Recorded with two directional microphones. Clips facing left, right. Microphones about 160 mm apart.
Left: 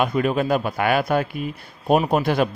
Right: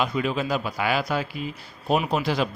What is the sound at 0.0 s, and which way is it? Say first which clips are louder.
A man's voice: left 5 dB; 50° left (ahead or behind).